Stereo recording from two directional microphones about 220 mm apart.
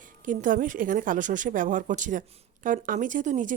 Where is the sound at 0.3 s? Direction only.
35° right (ahead or behind).